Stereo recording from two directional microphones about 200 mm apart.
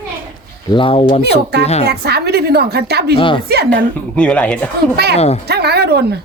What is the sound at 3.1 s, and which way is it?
Speech, 25° left (ahead or behind).